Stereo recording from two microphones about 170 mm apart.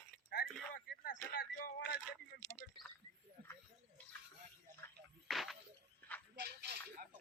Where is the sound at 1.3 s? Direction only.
60° left (ahead or behind).